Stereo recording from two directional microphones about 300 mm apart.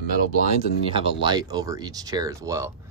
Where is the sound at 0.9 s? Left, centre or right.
Centre.